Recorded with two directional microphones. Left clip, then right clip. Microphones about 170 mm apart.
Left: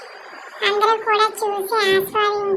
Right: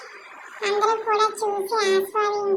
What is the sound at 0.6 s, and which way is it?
A child's voice, 30° left (ahead or behind).